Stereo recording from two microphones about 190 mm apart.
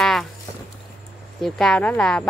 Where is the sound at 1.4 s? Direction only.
5° left (ahead or behind).